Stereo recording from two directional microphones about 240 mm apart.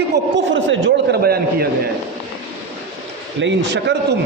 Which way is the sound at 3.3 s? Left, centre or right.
Right.